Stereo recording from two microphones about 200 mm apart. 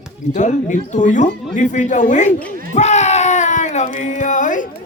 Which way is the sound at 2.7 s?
35° left (ahead or behind).